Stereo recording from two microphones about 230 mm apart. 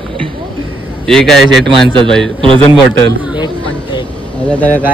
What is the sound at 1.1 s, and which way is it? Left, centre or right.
Speech, centre.